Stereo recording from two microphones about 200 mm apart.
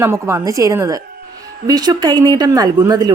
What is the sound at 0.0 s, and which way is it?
A woman's voice, 15° right (ahead or behind).